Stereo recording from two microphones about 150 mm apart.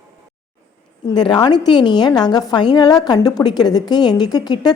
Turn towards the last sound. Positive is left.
turn(degrees=30)  # may be behind; listen again after turning